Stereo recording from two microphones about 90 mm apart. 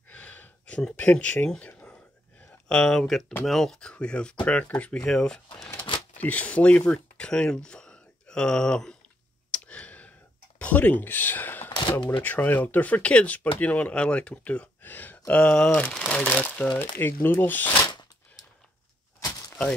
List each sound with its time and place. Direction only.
0.1 s a sound: 15° left (ahead or behind)
2.7 s speech: 10° left (ahead or behind)
9.5 s sigh: 15° left (ahead or behind)
10.6 s speech: 15° left (ahead or behind)
17.6 s shuffling cards: 60° left (ahead or behind)